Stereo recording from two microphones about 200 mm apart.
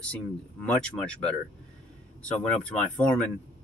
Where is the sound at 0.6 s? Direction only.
5° left (ahead or behind).